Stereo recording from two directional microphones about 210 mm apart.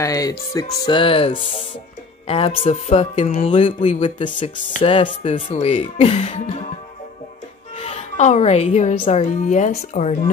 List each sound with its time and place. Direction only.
0.0 s speech: 15° left (ahead or behind)
7.7 s a woman's voice: 35° left (ahead or behind)